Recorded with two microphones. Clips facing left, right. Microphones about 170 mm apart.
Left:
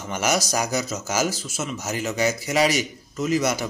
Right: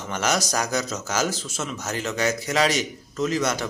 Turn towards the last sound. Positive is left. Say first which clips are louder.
# left 1 dB
turn(degrees=10)  # may be behind; listen again after turning